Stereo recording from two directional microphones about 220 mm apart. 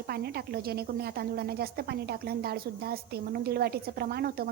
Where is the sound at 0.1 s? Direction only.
45° right (ahead or behind).